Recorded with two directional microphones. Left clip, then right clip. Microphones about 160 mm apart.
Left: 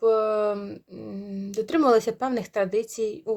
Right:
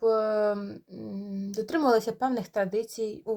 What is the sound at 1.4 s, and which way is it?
Speech, 25° left (ahead or behind).